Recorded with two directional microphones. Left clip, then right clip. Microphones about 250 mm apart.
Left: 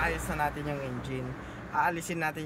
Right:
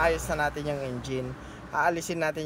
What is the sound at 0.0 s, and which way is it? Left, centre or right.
Speech, centre.